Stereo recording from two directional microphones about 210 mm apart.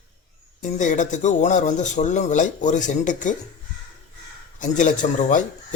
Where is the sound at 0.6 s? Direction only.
35° left (ahead or behind).